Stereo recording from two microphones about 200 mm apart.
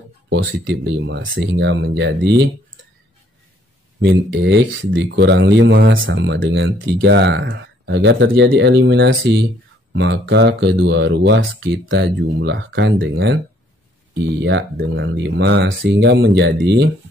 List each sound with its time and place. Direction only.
0.3 s speech: 65° right (ahead or behind)
4.0 s speech: 60° right (ahead or behind)
14.4 s speech: 60° right (ahead or behind)